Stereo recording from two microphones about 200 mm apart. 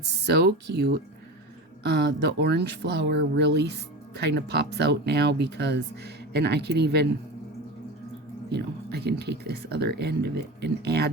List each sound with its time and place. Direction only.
0.0 s speech: 55° right (ahead or behind)
8.4 s speech: 55° right (ahead or behind)